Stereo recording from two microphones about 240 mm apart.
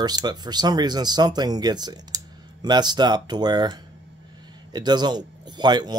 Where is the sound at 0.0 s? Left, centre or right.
Centre.